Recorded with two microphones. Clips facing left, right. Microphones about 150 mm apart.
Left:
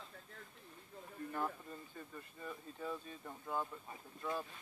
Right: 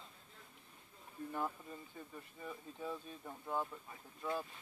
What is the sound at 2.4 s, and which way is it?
Speech, 10° right (ahead or behind).